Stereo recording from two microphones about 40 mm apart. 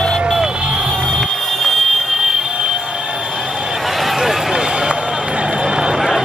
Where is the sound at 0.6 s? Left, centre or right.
Right.